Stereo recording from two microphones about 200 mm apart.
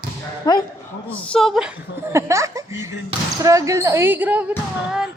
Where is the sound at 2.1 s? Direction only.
15° right (ahead or behind).